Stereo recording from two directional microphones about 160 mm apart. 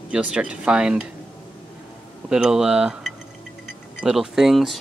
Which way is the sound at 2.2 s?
5° right (ahead or behind).